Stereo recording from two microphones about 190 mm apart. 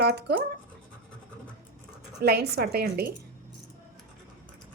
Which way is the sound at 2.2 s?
55° right (ahead or behind).